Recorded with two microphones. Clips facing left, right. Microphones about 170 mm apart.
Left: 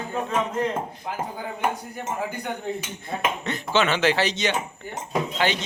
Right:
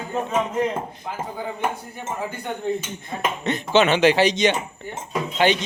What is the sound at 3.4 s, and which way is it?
Speech, 20° right (ahead or behind).